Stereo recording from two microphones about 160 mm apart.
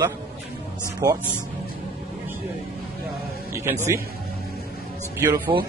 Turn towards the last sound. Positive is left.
turn(degrees=-35)  # may be behind; listen again after turning